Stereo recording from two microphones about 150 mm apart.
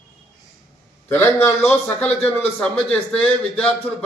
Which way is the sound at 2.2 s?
10° left (ahead or behind).